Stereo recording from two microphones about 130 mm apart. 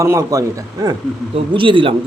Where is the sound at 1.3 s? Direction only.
40° right (ahead or behind).